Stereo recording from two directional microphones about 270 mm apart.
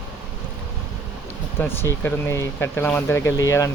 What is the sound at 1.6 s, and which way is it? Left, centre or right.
Speech, centre.